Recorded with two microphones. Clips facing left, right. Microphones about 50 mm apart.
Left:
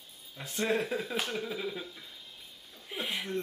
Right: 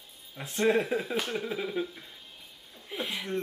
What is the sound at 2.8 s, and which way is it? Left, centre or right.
Speech, centre.